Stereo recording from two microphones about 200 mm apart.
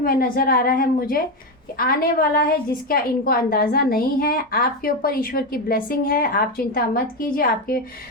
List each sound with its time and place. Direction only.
0.0 s a woman's voice: 45° left (ahead or behind)